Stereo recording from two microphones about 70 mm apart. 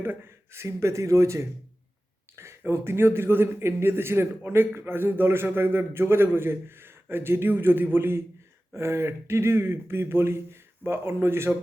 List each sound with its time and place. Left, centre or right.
0.0 s a man's voice: right